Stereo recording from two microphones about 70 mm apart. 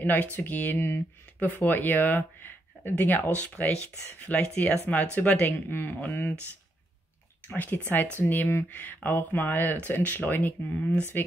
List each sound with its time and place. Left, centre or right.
0.0 s speech: left
0.7 s speech: left
1.4 s speech: left
5.7 s speech: left
7.4 s speech: left